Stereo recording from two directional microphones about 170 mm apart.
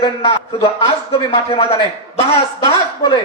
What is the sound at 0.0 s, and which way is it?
A man's voice, 30° left (ahead or behind).